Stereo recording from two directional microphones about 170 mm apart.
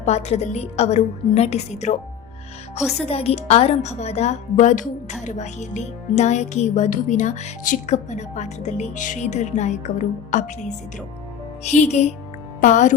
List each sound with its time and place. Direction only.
0.0 s a woman's voice: 40° left (ahead or behind)